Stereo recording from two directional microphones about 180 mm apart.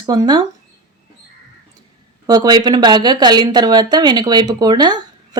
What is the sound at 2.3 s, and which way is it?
Speech, 20° right (ahead or behind).